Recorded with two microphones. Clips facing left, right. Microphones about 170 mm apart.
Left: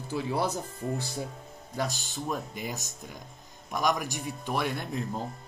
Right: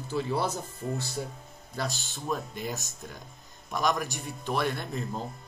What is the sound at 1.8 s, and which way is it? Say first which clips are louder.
Speech: left 2 dB; 10° left (ahead or behind).